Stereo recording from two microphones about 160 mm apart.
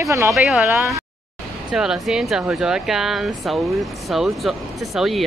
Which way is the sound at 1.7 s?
5° right (ahead or behind).